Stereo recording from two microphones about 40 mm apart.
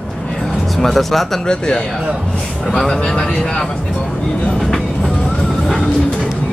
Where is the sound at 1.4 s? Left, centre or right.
Left.